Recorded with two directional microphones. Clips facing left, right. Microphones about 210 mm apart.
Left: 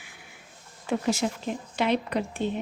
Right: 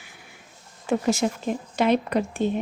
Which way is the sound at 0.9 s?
45° right (ahead or behind).